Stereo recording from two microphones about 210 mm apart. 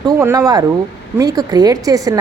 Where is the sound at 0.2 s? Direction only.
15° right (ahead or behind).